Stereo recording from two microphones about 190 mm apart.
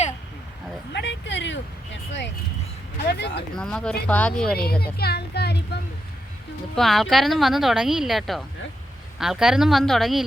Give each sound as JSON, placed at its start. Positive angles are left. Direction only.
{"t": 0.9, "sound": "vehicle", "side_deg": 70}
{"t": 3.1, "sound": "speech", "side_deg": 60}
{"t": 3.5, "sound": "speech", "side_deg": 5}
{"t": 4.9, "sound": "speech", "side_deg": 55}
{"t": 6.7, "sound": "speech", "side_deg": 0}